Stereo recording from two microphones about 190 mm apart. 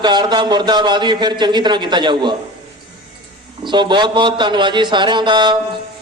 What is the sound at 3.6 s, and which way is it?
Speech, 25° right (ahead or behind).